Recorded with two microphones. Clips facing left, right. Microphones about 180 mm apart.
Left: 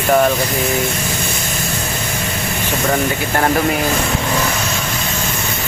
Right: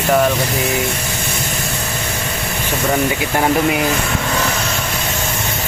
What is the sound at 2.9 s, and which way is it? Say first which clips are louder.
Speech: right 1 dB; 5° right (ahead or behind).